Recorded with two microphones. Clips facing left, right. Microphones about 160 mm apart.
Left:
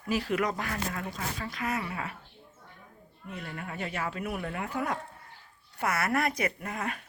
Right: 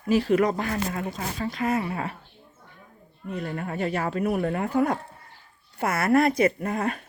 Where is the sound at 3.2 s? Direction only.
40° right (ahead or behind).